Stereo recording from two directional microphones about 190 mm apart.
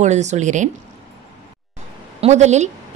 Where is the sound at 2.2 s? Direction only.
35° right (ahead or behind).